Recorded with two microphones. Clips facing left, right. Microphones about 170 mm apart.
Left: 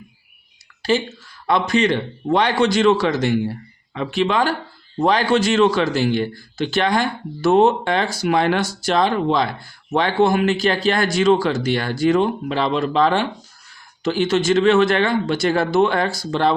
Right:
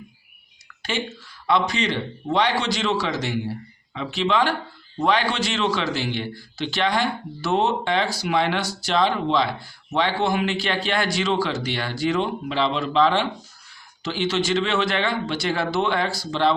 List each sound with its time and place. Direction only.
0.8 s speech: 35° left (ahead or behind)
1.5 s a man's voice: 50° left (ahead or behind)